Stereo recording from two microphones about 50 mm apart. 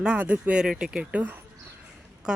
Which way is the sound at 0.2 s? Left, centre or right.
Right.